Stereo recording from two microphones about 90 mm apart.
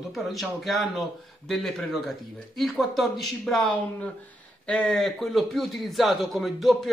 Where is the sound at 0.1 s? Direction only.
Centre (ahead or behind).